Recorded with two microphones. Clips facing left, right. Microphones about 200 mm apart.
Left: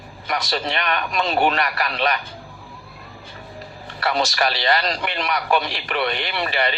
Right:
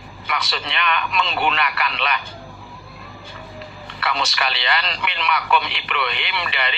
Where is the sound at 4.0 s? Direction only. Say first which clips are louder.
Left 4 dB; 40° left (ahead or behind).